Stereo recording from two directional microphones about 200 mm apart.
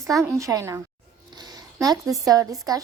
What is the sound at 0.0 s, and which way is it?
A woman's voice, 15° right (ahead or behind).